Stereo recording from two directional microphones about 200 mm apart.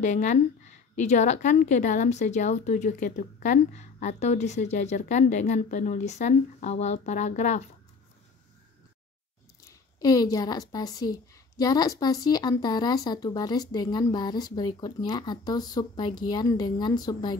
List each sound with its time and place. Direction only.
0.0 s a woman's voice: 35° left (ahead or behind)
9.6 s a woman's voice: 15° left (ahead or behind)